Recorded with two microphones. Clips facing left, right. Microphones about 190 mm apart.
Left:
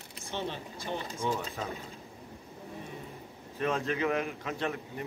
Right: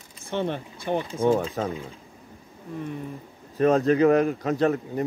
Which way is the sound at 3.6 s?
40° right (ahead or behind).